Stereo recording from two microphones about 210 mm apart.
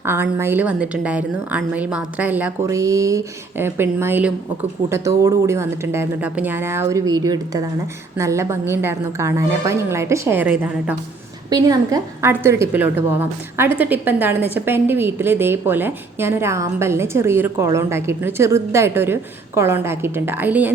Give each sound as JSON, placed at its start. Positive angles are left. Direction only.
{"t": 0.0, "sound": "a woman's voice", "side_deg": -10}